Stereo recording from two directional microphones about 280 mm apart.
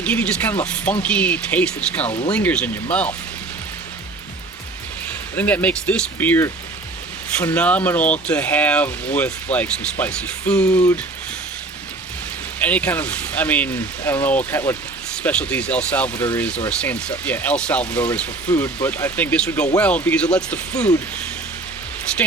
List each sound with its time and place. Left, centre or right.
0.0 s speech: centre
2.0 s speech: centre
2.3 s speech: centre
5.3 s speech: centre
12.6 s speech: centre